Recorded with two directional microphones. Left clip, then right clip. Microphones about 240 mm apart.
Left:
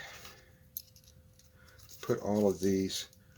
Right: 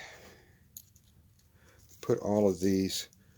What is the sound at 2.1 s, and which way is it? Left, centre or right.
Speech, right.